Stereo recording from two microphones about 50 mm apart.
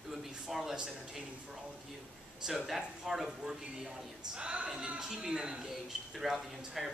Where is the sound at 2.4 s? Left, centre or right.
Centre.